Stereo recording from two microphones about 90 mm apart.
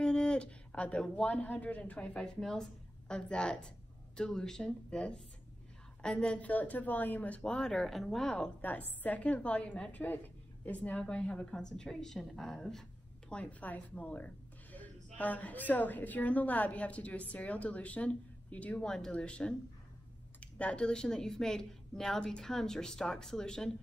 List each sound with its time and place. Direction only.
0.0 s a woman's voice: 10° left (ahead or behind)
8.5 s a woman's voice: 20° left (ahead or behind)